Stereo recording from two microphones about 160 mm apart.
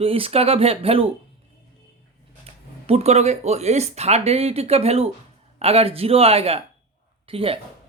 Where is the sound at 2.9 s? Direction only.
40° right (ahead or behind).